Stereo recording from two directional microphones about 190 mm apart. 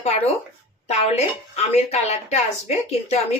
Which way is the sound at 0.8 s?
35° left (ahead or behind).